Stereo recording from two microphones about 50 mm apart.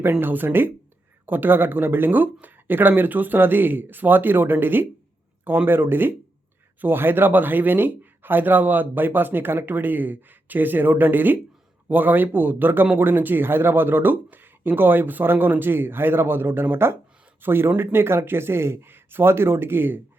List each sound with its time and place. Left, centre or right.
0.0 s speech: right